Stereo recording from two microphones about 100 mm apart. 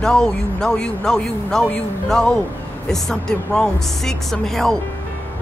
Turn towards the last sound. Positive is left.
turn(degrees=5)  # may be behind; listen again after turning